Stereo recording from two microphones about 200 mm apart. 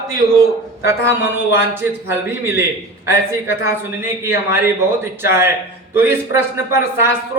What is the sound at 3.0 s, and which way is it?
A man's voice, 15° right (ahead or behind).